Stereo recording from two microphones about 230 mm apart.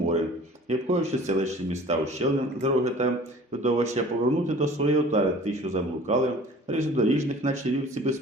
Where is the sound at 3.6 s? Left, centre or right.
Right.